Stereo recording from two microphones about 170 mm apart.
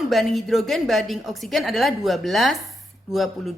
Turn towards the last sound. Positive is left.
turn(degrees=0)  # may be behind; listen again after turning